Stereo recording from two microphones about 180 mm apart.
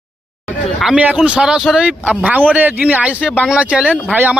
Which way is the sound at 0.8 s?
5° right (ahead or behind).